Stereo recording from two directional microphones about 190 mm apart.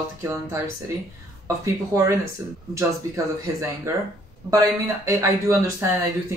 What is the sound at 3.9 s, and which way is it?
Speech, 15° right (ahead or behind).